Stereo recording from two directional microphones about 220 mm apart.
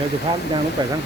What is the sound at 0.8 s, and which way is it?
Speech, 20° right (ahead or behind).